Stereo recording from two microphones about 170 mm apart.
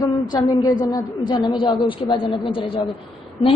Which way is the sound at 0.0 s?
20° left (ahead or behind).